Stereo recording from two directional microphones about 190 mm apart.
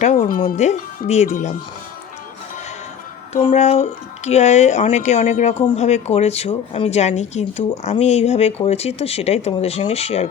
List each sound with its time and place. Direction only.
0.0 s a woman's voice: 40° left (ahead or behind)
3.4 s a woman's voice: 35° left (ahead or behind)